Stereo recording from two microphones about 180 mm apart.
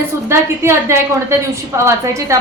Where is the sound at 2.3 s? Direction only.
15° right (ahead or behind).